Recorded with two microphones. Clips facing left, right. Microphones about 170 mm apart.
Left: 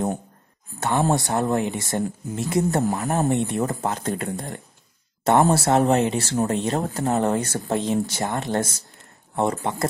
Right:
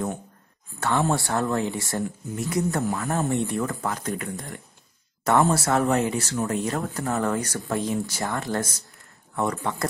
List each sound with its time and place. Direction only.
0.7 s speech: 15° left (ahead or behind)